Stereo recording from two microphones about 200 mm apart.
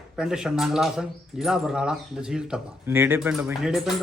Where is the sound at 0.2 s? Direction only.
Centre (ahead or behind).